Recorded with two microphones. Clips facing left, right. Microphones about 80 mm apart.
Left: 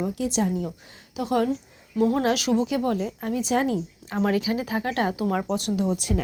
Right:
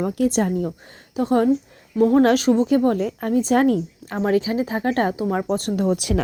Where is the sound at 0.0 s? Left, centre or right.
Right.